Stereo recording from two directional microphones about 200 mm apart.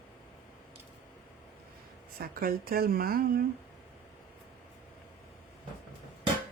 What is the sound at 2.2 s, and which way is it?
Speech, 45° right (ahead or behind).